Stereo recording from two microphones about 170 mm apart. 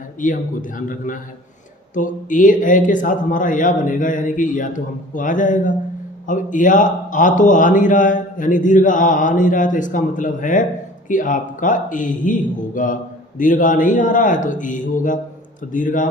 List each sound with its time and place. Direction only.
0.2 s a man's voice: 50° left (ahead or behind)